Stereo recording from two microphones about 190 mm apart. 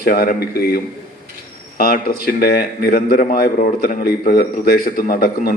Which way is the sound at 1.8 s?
50° left (ahead or behind).